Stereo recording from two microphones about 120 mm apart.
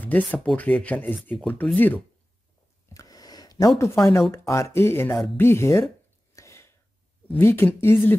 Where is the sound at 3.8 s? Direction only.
25° left (ahead or behind).